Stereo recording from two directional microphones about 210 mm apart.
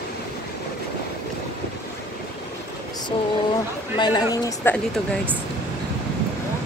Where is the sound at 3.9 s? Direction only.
20° left (ahead or behind).